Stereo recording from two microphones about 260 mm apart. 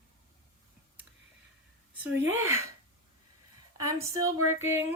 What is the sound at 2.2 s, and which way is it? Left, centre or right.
Speech, centre.